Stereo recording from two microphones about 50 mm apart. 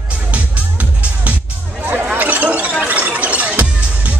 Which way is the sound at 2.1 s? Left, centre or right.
Right.